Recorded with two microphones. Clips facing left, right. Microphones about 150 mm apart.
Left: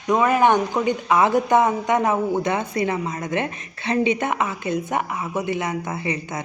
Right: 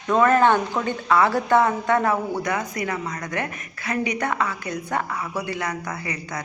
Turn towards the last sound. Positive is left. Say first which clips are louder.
# left 4 dB
turn(degrees=25)  # may be behind; listen again after turning